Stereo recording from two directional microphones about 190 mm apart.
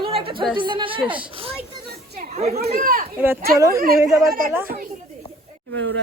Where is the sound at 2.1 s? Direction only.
50° right (ahead or behind).